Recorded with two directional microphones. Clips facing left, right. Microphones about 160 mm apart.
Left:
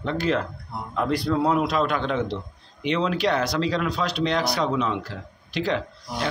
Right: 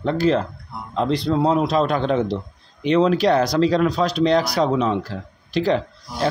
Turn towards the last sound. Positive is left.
turn(degrees=-35)  # may be behind; listen again after turning